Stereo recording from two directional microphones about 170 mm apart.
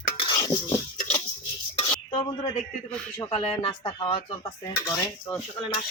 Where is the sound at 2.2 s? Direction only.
25° left (ahead or behind).